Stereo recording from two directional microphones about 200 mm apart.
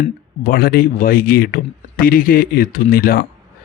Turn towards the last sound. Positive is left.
turn(degrees=50)  # may be behind; listen again after turning